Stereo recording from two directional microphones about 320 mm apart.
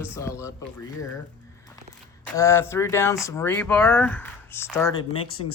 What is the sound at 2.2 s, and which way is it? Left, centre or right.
Speech, centre.